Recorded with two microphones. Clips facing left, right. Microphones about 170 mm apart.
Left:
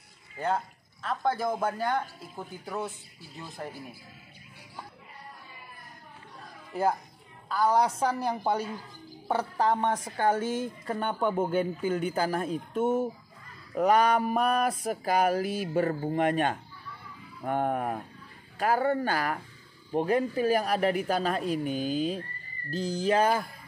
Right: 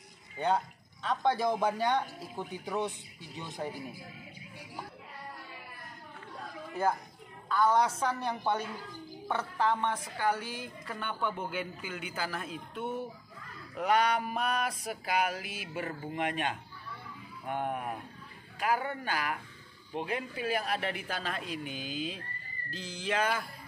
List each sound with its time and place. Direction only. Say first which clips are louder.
0.4 s speech: even; 5° left (ahead or behind)
7.4 s a woman's voice: left 2 dB; 35° left (ahead or behind)